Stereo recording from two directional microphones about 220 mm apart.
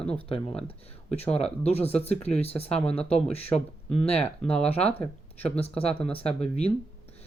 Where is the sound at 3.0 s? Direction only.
5° left (ahead or behind).